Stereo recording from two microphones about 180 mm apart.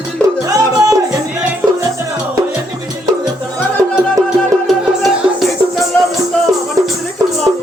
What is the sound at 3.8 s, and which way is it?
Music, 20° right (ahead or behind).